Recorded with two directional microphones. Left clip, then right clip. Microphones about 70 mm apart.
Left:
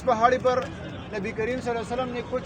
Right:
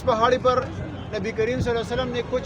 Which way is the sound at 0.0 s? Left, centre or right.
Centre.